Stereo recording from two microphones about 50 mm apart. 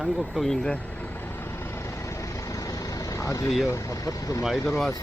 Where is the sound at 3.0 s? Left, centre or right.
Left.